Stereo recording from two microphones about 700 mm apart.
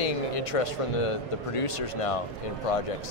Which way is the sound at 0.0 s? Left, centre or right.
Left.